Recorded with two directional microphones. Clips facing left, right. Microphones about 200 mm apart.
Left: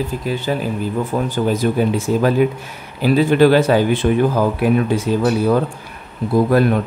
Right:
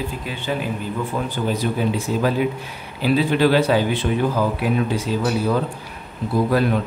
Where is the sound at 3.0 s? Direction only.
50° left (ahead or behind).